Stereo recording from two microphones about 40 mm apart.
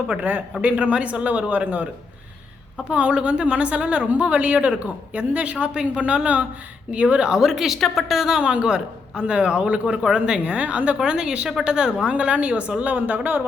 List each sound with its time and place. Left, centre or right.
0.2 s a man's voice: right
2.9 s a man's voice: right
7.3 s a woman's voice: centre
8.4 s a man's voice: right
11.0 s a man's voice: right